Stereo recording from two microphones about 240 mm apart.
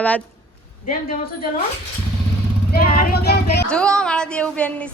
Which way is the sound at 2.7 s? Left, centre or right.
Left.